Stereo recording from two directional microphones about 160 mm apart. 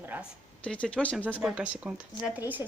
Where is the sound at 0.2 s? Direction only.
5° left (ahead or behind).